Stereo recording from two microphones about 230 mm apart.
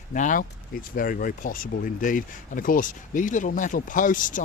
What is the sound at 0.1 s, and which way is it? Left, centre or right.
Speech, left.